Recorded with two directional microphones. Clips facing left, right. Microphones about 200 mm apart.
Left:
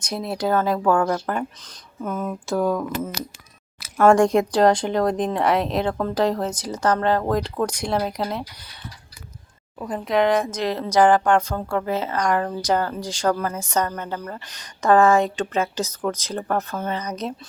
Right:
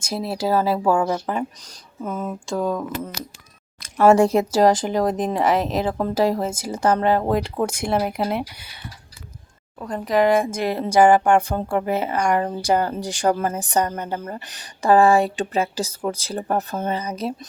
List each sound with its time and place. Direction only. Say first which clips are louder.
0.1 s speech: right 1 dB; 5° right (ahead or behind)
2.2 s speech: left 2 dB; 5° left (ahead or behind)
3.8 s a sound: even; 5° left (ahead or behind)
4.0 s speech: right 1 dB; 5° right (ahead or behind)
9.7 s speech: right 1 dB; 5° left (ahead or behind); by 14.5 s 20° right (ahead or behind)
14.8 s speech: right 1 dB; 30° right (ahead or behind)
15.2 s speech: right 1 dB; 10° right (ahead or behind)
16.6 s speech: right 2 dB; 30° right (ahead or behind)
16.9 s speech: right 2 dB; 10° right (ahead or behind)